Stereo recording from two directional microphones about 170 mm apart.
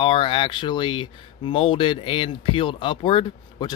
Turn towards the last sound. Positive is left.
turn(degrees=30)  # may be behind; listen again after turning